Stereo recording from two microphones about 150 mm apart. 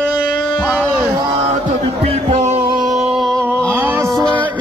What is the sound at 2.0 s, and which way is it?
Music, 45° right (ahead or behind).